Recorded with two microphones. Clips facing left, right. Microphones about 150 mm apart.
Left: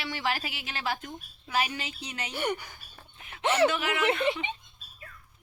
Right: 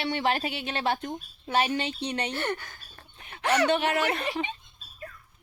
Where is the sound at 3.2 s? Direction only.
35° right (ahead or behind).